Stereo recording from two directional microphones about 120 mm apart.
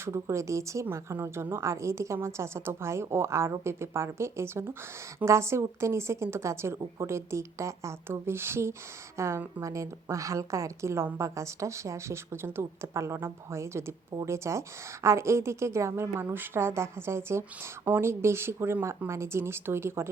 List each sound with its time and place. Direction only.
0.0 s a woman's voice: 25° right (ahead or behind)